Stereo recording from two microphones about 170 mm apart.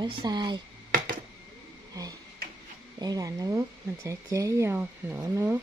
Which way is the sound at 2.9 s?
20° right (ahead or behind).